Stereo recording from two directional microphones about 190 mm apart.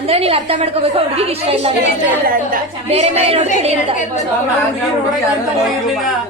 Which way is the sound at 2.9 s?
30° right (ahead or behind).